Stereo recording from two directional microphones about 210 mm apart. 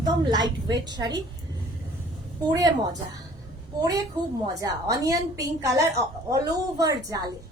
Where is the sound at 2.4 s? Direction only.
15° right (ahead or behind).